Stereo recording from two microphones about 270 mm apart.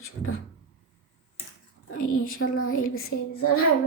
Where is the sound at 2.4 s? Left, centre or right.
Left.